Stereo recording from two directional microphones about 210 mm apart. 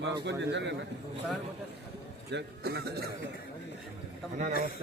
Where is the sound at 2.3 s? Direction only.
50° right (ahead or behind).